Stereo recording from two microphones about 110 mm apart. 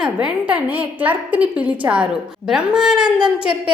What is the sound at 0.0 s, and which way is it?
A woman's voice, 10° right (ahead or behind).